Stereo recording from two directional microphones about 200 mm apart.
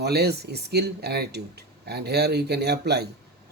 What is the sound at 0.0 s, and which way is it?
Speech, 55° right (ahead or behind).